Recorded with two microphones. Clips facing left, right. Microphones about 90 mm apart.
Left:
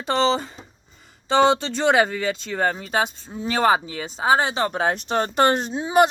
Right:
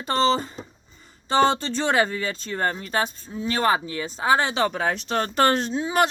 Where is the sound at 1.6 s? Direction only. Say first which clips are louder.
Left 3 dB; 65° left (ahead or behind).